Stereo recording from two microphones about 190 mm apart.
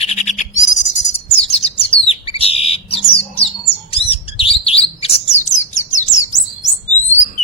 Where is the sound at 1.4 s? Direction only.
30° left (ahead or behind).